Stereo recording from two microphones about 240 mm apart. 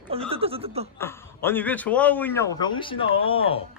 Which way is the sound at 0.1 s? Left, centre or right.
Right.